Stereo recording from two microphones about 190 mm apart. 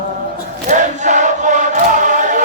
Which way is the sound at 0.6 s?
40° right (ahead or behind).